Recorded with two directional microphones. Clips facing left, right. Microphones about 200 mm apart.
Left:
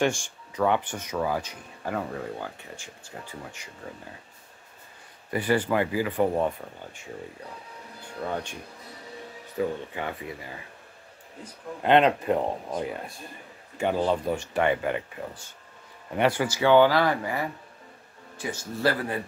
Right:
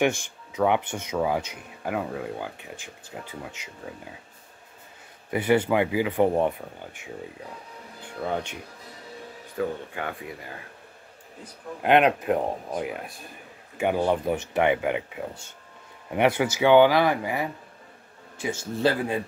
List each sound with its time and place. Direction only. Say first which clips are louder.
0.0 s speech: right 2 dB; 20° right (ahead or behind)
1.8 s speech: right 2 dB; 10° right (ahead or behind)
5.3 s speech: right 3 dB; 15° right (ahead or behind)
9.6 s speech: even; centre (ahead or behind)
11.8 s speech: even; 10° right (ahead or behind)